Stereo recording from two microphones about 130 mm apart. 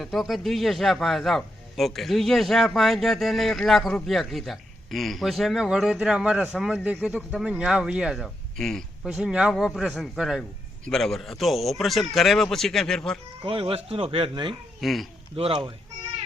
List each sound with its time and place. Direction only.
0.0 s a man's voice: centre (ahead or behind)
13.4 s speech: 45° right (ahead or behind)
14.8 s speech: centre (ahead or behind)
15.4 s speech: 50° right (ahead or behind)